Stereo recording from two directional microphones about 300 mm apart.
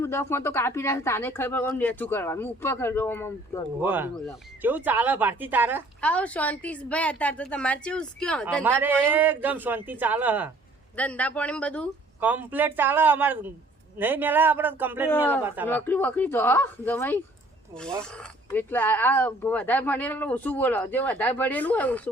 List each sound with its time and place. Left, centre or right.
0.0 s speech: centre
3.8 s speech: centre
6.0 s speech: centre
15.6 s speech: centre